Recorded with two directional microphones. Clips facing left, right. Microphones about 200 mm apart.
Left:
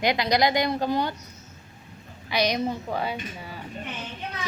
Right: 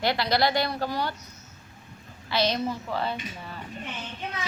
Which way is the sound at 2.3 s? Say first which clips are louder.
Left 1 dB; 15° left (ahead or behind).